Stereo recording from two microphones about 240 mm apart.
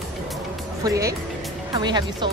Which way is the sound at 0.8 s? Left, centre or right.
Centre.